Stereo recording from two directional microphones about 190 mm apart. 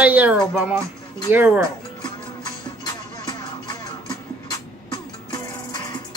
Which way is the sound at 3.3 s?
25° left (ahead or behind).